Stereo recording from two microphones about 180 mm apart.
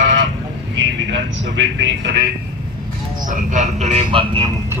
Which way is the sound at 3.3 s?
40° right (ahead or behind).